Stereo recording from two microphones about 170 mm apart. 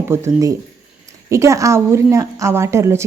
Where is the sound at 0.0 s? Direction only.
15° right (ahead or behind).